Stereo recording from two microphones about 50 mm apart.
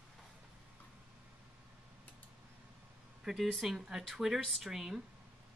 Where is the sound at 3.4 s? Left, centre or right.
Centre.